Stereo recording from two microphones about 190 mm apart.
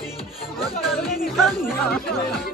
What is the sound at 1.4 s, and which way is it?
Speech, centre (ahead or behind).